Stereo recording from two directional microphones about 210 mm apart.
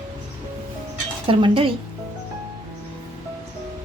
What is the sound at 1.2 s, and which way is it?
Speech, 25° right (ahead or behind).